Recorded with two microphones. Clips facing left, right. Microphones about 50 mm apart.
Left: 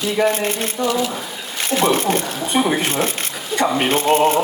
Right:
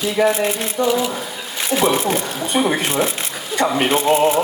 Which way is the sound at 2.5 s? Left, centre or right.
Centre.